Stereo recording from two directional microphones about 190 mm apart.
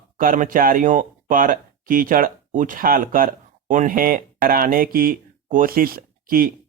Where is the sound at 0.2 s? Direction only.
45° right (ahead or behind).